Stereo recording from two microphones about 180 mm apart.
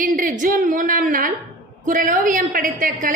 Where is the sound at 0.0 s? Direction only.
50° right (ahead or behind).